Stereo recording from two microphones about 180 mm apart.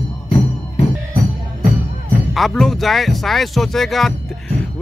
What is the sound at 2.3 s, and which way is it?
Speech, centre (ahead or behind).